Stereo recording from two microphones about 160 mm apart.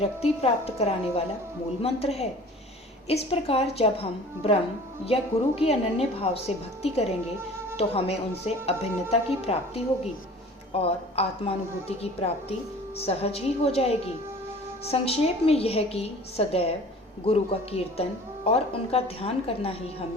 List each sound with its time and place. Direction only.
0.0 s a woman's voice: 40° left (ahead or behind)
5.0 s a woman's voice: 35° left (ahead or behind)